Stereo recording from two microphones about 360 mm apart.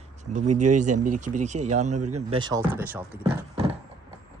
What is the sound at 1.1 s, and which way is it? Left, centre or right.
Speech, right.